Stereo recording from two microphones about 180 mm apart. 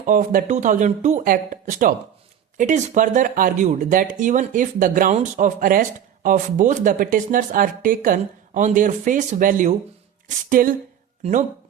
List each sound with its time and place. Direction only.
0.0 s speech: 45° right (ahead or behind)